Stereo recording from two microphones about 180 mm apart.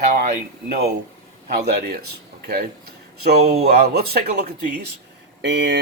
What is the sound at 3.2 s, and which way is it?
Speech, 60° right (ahead or behind).